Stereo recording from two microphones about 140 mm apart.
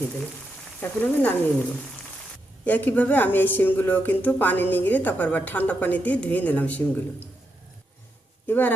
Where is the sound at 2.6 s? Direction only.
10° left (ahead or behind).